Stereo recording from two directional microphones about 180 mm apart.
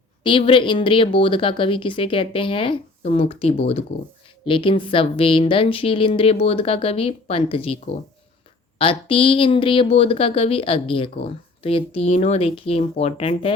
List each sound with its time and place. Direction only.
0.2 s speech: 25° left (ahead or behind)